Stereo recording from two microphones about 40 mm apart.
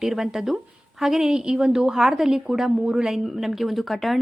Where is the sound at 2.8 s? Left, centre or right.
Right.